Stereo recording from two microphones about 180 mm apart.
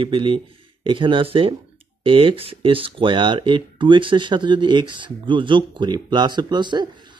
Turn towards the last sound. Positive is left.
turn(degrees=-25)  # may be behind; listen again after turning